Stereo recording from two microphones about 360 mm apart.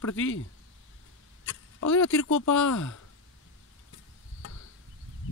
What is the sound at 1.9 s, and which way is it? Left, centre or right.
Speech, left.